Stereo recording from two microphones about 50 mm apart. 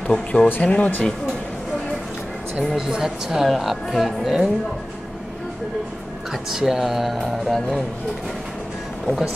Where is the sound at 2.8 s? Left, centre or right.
Centre.